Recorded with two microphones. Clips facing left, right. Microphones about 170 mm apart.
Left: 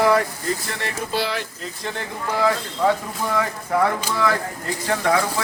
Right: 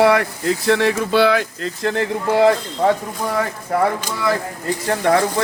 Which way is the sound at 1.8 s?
90° right.